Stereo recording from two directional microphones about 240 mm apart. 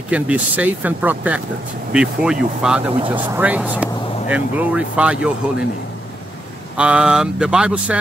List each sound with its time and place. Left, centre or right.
0.1 s speech: centre
2.9 s speech: right
3.3 s speech: centre
6.8 s speech: centre